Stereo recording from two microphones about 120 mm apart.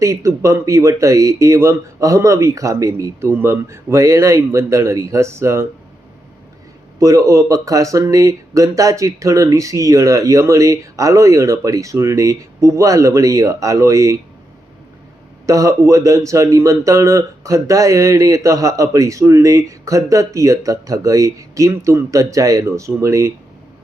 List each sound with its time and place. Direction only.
0.0 s speech: 25° right (ahead or behind)
7.0 s speech: 25° right (ahead or behind)
15.4 s speech: 25° right (ahead or behind)